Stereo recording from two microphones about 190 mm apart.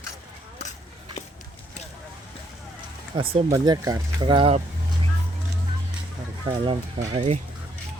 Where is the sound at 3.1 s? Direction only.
25° right (ahead or behind).